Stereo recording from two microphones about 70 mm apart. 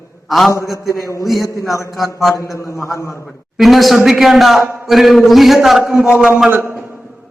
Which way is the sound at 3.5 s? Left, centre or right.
Centre.